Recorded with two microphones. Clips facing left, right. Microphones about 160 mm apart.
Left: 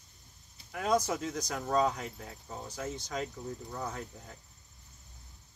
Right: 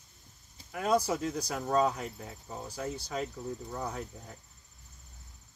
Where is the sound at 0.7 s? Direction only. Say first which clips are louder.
Right 1 dB; 5° right (ahead or behind).